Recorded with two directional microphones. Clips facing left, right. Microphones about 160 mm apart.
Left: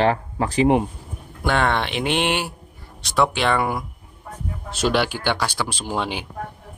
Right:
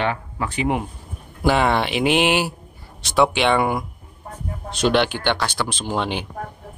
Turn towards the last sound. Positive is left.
turn(degrees=10)  # may be behind; listen again after turning